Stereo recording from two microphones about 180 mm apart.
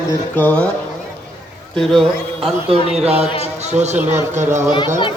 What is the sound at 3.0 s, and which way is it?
Speech, 35° right (ahead or behind).